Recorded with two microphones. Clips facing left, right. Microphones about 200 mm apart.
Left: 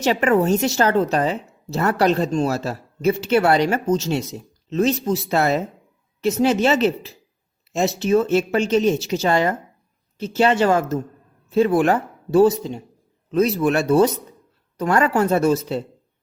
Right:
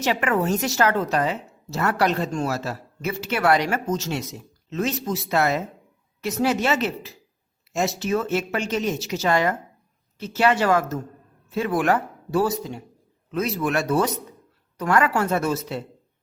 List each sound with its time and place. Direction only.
0.0 s a woman's voice: 30° left (ahead or behind)